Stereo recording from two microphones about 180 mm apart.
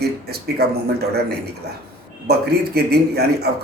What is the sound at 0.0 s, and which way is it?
Speech, 60° right (ahead or behind).